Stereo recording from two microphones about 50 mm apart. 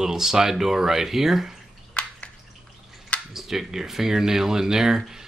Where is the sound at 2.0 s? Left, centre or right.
Left.